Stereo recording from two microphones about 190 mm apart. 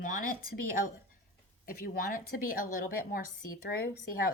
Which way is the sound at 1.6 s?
50° left (ahead or behind).